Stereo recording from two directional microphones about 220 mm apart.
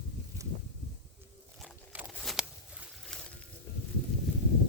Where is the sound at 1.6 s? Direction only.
Centre (ahead or behind).